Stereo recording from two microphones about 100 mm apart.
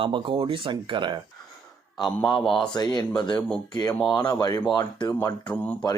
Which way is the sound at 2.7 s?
45° left (ahead or behind).